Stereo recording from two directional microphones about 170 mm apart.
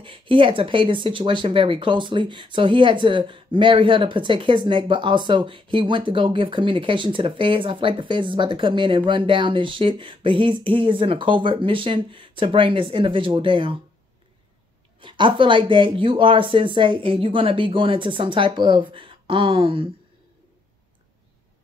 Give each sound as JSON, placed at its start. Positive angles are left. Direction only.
{"t": 0.0, "sound": "speech", "side_deg": -30}
{"t": 15.0, "sound": "speech", "side_deg": -30}